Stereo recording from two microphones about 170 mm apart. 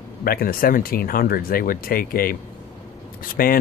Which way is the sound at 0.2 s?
60° left (ahead or behind).